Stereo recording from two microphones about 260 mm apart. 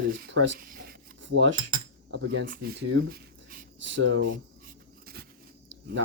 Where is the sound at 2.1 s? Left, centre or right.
Right.